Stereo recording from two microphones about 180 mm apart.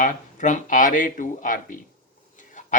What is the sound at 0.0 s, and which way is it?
Speech, 45° left (ahead or behind).